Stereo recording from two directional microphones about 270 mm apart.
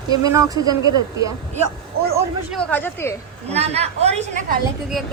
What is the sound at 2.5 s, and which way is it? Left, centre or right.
Speech, centre.